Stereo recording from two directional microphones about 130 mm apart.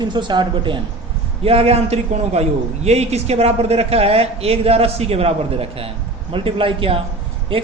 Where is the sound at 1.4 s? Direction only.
50° right (ahead or behind).